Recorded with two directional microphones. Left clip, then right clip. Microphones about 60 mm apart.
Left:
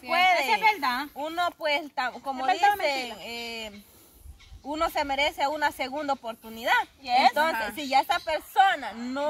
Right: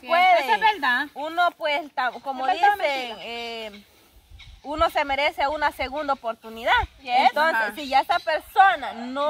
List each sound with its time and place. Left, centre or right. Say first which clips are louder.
0.2 s a sound: right 4 dB; centre
0.6 s a sound: right 3 dB; left
1.1 s a woman's voice: right 6 dB; centre
4.6 s speech: right 5 dB; right
7.1 s speech: right 2 dB; left
7.7 s a woman's voice: right 3 dB; centre